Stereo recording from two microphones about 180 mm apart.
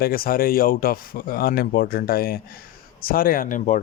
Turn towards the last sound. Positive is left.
turn(degrees=45)  # may be behind; listen again after turning